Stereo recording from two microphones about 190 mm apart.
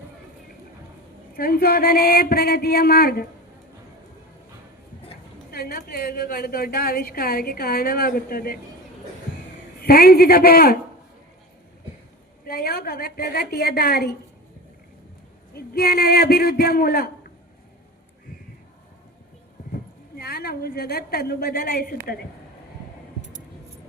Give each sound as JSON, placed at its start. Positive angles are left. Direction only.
{"t": 1.4, "sound": "a woman's voice", "side_deg": 50}
{"t": 5.5, "sound": "a woman's voice", "side_deg": 50}
{"t": 9.8, "sound": "a woman's voice", "side_deg": 50}
{"t": 12.5, "sound": "a woman's voice", "side_deg": 50}
{"t": 15.5, "sound": "a woman's voice", "side_deg": 55}
{"t": 20.1, "sound": "a woman's voice", "side_deg": 55}